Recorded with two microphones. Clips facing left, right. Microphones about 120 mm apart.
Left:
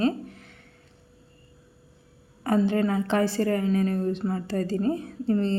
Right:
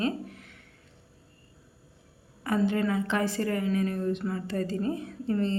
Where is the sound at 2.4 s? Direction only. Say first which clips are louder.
Left 3 dB; 35° left (ahead or behind).